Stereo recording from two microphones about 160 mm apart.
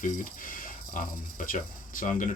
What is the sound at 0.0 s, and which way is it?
Speech, 60° left (ahead or behind).